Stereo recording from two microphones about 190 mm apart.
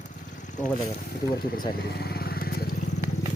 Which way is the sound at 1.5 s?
50° left (ahead or behind).